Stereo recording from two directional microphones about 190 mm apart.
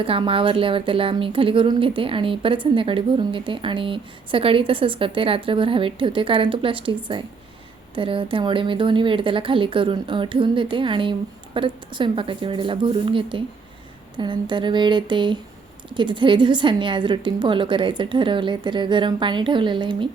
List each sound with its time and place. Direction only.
0.0 s speech: 30° right (ahead or behind)